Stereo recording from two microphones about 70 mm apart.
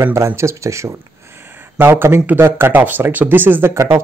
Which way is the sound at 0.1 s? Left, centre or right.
Right.